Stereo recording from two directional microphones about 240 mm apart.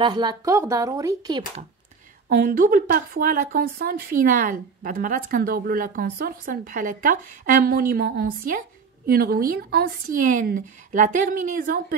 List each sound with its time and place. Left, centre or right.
0.0 s a woman's voice: centre
2.2 s speech: right